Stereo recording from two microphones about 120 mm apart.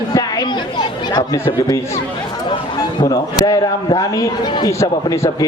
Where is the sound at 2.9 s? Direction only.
35° left (ahead or behind).